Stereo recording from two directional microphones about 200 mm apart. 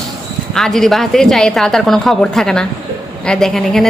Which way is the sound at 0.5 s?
Centre (ahead or behind).